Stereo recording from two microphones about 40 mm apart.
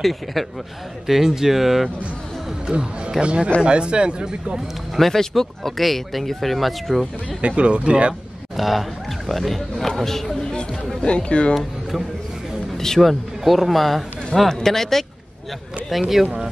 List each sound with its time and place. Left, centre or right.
0.0 s speech: centre
1.0 s speech: centre
2.6 s a man's voice: right
4.9 s speech: centre
7.4 s speech: right
8.5 s speech: centre
10.4 s chatter: left
11.0 s speech: left
12.7 s a man's voice: centre
15.9 s speech: centre